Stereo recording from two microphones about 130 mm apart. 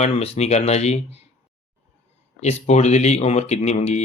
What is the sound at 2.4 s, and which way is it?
Speech, 60° left (ahead or behind).